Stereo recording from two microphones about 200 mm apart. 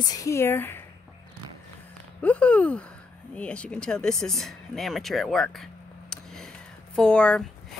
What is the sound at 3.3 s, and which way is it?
Speech, 5° left (ahead or behind).